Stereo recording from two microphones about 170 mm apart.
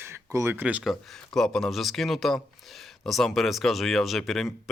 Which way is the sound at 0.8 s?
Centre (ahead or behind).